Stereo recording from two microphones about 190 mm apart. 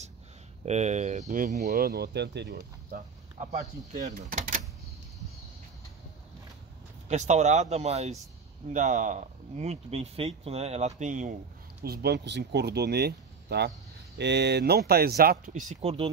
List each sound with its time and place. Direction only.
0.7 s speech: 35° right (ahead or behind)
1.7 s speech: 55° right (ahead or behind)
3.5 s speech: 45° right (ahead or behind)
7.1 s speech: 40° right (ahead or behind)
11.8 s speech: 55° right (ahead or behind)
15.8 s speech: 30° right (ahead or behind)